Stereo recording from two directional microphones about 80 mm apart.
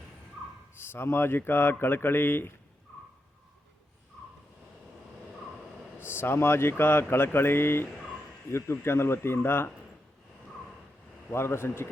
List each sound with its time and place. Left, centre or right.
0.8 s speech: left
6.0 s speech: left
11.3 s speech: left